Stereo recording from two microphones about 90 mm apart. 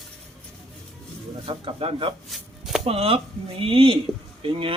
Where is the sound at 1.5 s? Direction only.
75° right (ahead or behind).